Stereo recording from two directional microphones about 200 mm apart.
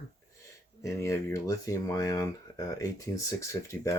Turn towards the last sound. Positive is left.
turn(degrees=15)  # may be behind; listen again after turning